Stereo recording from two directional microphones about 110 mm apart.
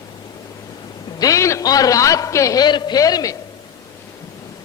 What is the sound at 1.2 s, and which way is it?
A man's voice, 30° left (ahead or behind).